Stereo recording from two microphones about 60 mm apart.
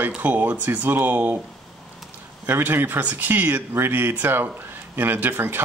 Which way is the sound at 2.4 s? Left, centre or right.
Right.